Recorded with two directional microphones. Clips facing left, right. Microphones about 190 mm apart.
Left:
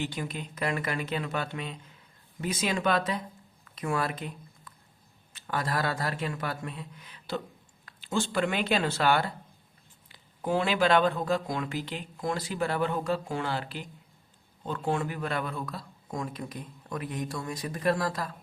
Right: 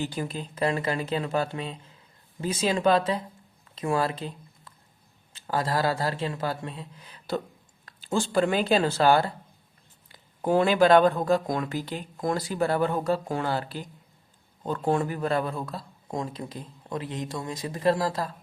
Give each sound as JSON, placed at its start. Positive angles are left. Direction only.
{"t": 0.0, "sound": "speech", "side_deg": -35}